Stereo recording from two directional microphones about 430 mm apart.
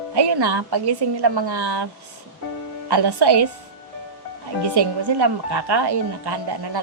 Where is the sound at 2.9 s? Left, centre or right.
Right.